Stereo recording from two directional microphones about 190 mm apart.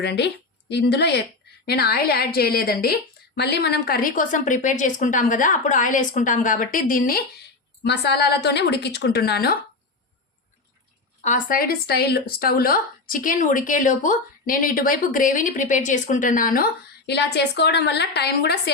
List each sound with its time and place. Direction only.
0.0 s a woman's voice: 60° left (ahead or behind)
7.9 s a woman's voice: 60° left (ahead or behind)
11.2 s a woman's voice: 40° left (ahead or behind)
17.1 s a woman's voice: 65° left (ahead or behind)